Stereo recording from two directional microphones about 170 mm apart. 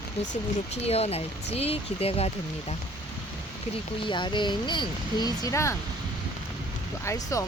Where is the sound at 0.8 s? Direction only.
35° left (ahead or behind).